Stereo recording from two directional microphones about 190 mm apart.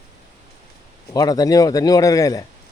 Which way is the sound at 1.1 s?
20° left (ahead or behind).